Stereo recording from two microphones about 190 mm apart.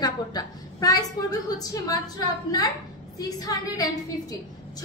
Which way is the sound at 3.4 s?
20° left (ahead or behind).